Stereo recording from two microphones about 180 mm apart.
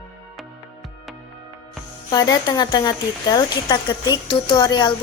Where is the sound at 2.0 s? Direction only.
20° left (ahead or behind).